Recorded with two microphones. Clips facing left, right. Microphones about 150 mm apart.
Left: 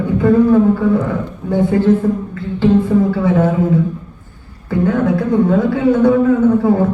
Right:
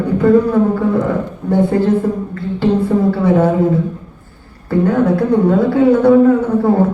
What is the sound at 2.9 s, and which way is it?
A woman's voice, 40° right (ahead or behind).